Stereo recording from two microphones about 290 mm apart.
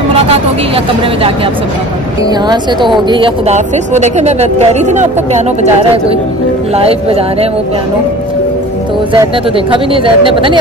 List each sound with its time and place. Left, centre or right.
2.4 s speech: centre
9.1 s speech: centre